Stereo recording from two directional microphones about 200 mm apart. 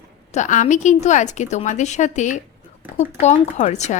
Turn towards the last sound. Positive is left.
turn(degrees=35)  # may be behind; listen again after turning